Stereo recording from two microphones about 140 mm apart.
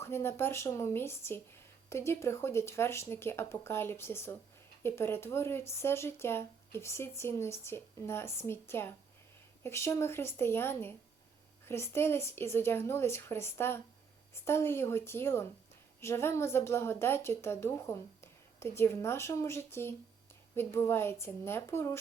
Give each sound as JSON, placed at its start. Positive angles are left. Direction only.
{"t": 0.0, "sound": "a woman's voice", "side_deg": 20}